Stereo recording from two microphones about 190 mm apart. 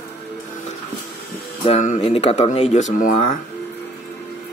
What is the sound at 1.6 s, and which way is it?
Speech, 35° left (ahead or behind).